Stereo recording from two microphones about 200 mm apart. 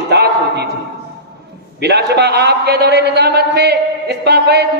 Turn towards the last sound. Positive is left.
turn(degrees=-55)  # may be behind; listen again after turning